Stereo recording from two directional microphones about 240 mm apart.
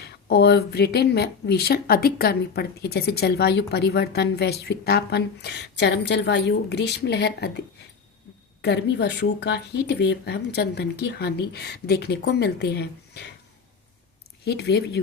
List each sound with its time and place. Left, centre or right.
0.0 s speech: left
8.6 s speech: left
14.4 s speech: left